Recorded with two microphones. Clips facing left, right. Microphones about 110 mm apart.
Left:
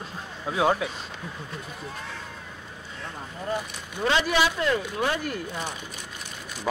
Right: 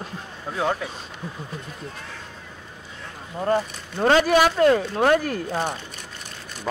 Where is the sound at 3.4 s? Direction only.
55° right (ahead or behind).